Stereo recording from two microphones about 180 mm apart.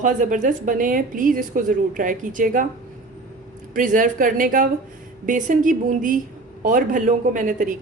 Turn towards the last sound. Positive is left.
turn(degrees=-45)  # may be behind; listen again after turning